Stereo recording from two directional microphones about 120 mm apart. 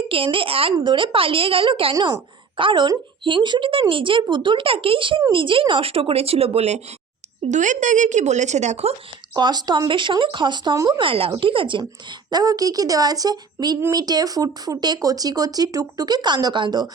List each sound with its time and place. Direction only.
0.1 s a woman's voice: 50° right (ahead or behind)
2.0 s a woman's voice: 35° right (ahead or behind); by 6.8 s 60° right (ahead or behind)
7.5 s a woman's voice: 90° right; by 9.0 s 65° right (ahead or behind)
9.3 s a woman's voice: 35° right (ahead or behind)
12.3 s speech: 30° right (ahead or behind)